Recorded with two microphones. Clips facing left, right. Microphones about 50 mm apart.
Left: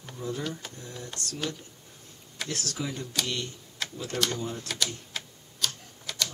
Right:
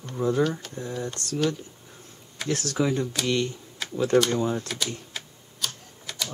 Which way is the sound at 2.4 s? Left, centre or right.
Right.